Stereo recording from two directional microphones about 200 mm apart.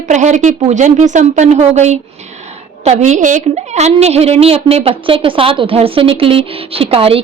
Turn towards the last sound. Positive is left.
turn(degrees=-30)  # may be behind; listen again after turning